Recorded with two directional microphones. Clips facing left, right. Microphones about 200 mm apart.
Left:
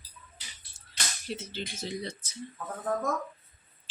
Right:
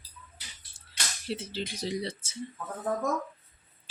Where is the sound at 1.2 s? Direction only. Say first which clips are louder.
Right 3 dB; 30° right (ahead or behind).